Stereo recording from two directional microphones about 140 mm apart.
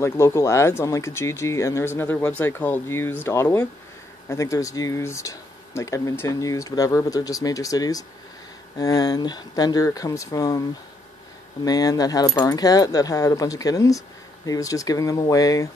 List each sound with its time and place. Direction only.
0.0 s speech: 20° left (ahead or behind)
11.6 s speech: 25° left (ahead or behind)